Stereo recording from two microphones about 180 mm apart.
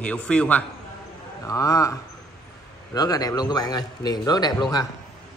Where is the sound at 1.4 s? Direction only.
20° left (ahead or behind).